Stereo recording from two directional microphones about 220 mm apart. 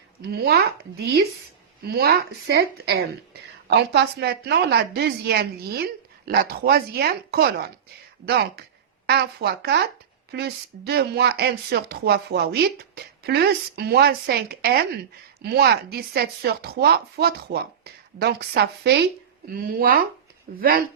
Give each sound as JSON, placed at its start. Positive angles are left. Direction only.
{"t": 0.2, "sound": "speech", "side_deg": -45}